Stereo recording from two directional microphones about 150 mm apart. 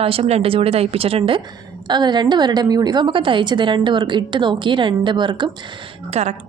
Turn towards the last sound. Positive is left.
turn(degrees=-45)  # may be behind; listen again after turning